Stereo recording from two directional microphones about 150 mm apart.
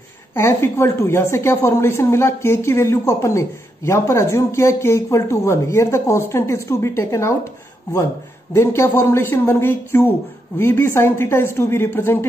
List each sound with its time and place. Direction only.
0.3 s speech: 15° left (ahead or behind)
8.5 s speech: 15° left (ahead or behind)